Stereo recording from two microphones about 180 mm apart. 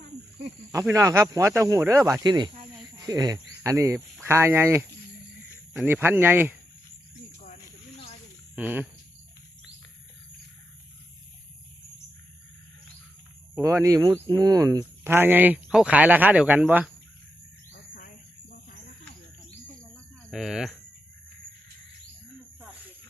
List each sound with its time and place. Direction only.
0.7 s speech: 15° right (ahead or behind)
7.4 s snake: 35° left (ahead or behind)
8.5 s speech: 10° right (ahead or behind)
13.6 s speech: 15° right (ahead or behind)
20.3 s speech: centre (ahead or behind)